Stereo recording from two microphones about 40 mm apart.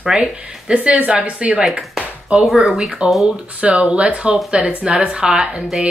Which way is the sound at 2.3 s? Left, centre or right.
Centre.